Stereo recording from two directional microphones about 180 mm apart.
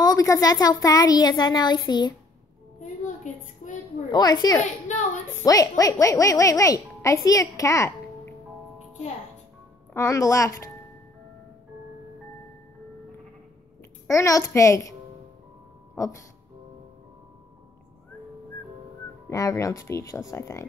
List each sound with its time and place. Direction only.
0.0 s a child's voice: 20° left (ahead or behind)
3.3 s a sound: 45° left (ahead or behind)
4.1 s a child's voice: 20° left (ahead or behind)
9.9 s speech: 15° left (ahead or behind)
14.0 s speech: 15° left (ahead or behind)
19.2 s speech: 15° left (ahead or behind)